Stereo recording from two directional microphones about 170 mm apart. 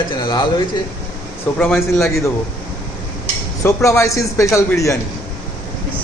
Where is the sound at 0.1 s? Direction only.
25° left (ahead or behind).